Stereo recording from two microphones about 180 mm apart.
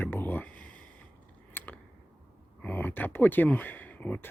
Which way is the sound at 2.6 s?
10° left (ahead or behind).